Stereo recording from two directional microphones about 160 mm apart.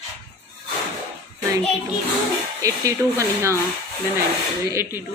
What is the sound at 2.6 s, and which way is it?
Speech, 20° right (ahead or behind).